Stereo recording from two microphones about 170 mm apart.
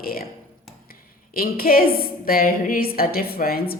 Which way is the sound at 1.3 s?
60° left (ahead or behind).